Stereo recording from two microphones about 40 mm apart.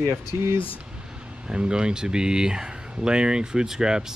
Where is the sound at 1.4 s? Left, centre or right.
Right.